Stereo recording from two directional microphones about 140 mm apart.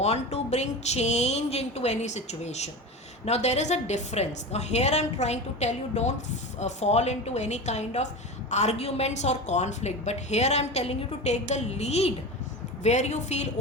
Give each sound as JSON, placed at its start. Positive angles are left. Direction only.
{"t": 0.0, "sound": "a woman's voice", "side_deg": 50}